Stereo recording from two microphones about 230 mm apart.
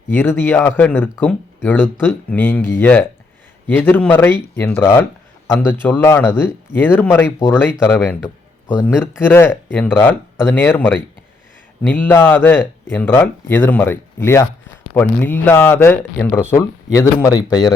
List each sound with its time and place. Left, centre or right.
0.1 s speech: centre